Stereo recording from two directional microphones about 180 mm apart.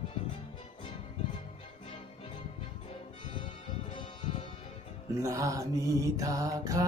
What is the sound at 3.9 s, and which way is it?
Music, 30° left (ahead or behind).